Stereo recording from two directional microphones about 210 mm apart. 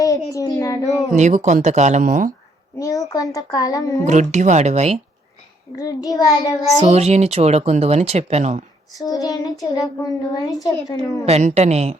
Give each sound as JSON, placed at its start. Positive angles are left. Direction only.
{"t": 0.3, "sound": "child singing", "side_deg": 15}
{"t": 1.1, "sound": "speech", "side_deg": -35}
{"t": 2.7, "sound": "child singing", "side_deg": 15}
{"t": 4.0, "sound": "speech", "side_deg": -35}
{"t": 5.7, "sound": "child singing", "side_deg": 15}
{"t": 6.8, "sound": "speech", "side_deg": -30}
{"t": 9.0, "sound": "child singing", "side_deg": 15}
{"t": 11.3, "sound": "speech", "side_deg": -30}